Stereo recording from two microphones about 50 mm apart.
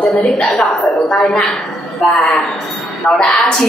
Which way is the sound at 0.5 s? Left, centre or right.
Centre.